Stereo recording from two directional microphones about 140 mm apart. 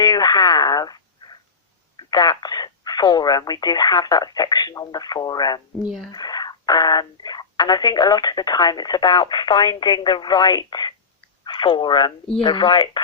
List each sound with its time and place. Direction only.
0.0 s a sound: 30° left (ahead or behind)
2.0 s speech: 30° left (ahead or behind)
5.8 s speech: 5° right (ahead or behind)
6.1 s speech: 30° left (ahead or behind)